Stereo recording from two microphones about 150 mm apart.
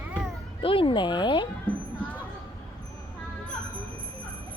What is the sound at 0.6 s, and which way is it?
Speech, 35° left (ahead or behind).